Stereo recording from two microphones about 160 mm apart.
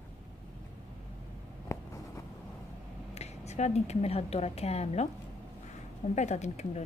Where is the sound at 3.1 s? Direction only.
45° left (ahead or behind).